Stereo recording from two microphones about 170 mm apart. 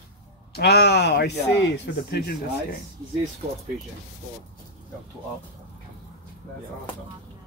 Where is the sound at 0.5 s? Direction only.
70° left (ahead or behind).